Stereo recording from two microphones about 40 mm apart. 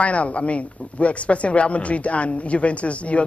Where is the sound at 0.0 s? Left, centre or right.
Left.